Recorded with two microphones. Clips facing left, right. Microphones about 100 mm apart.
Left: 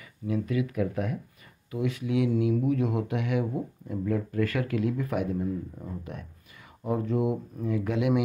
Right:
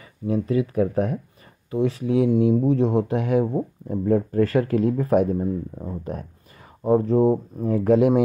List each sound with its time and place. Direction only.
0.3 s speech: 30° right (ahead or behind)